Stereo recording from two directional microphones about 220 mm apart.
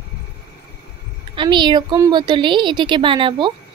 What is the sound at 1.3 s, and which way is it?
A child's voice, 20° right (ahead or behind).